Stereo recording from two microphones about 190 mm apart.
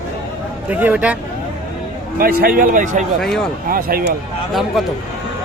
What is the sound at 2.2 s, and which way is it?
Speech, 50° right (ahead or behind).